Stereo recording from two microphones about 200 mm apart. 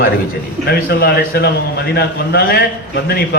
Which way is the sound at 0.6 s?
50° left (ahead or behind).